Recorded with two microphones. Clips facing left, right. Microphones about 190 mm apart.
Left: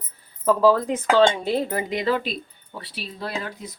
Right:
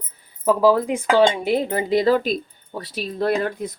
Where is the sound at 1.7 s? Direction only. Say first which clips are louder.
Right 6 dB; 30° right (ahead or behind).